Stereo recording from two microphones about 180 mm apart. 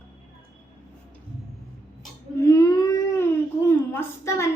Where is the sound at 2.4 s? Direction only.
20° left (ahead or behind).